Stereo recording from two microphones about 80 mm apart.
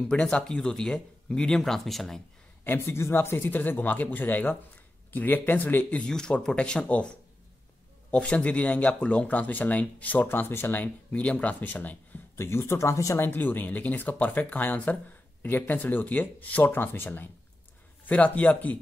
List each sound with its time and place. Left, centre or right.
0.1 s speech: centre
2.6 s speech: left
12.4 s speech: left
13.2 s speech: left